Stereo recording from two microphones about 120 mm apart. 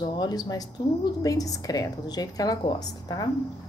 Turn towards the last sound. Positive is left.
turn(degrees=30)  # may be behind; listen again after turning